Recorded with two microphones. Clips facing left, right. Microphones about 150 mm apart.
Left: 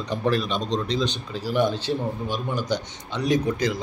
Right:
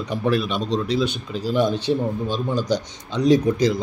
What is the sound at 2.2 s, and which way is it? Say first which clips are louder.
Speech: right 4 dB; 15° left (ahead or behind).